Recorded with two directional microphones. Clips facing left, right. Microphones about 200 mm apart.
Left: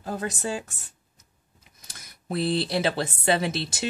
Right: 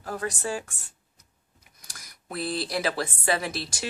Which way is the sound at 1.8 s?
25° left (ahead or behind).